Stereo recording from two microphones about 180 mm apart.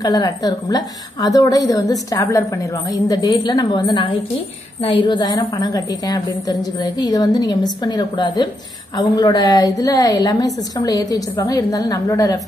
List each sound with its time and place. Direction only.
0.0 s a woman's voice: 20° left (ahead or behind)